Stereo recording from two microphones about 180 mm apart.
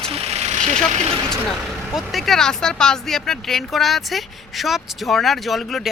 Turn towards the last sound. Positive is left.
turn(degrees=0)  # may be behind; listen again after turning